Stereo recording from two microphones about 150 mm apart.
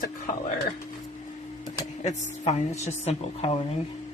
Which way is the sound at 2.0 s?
50° left (ahead or behind).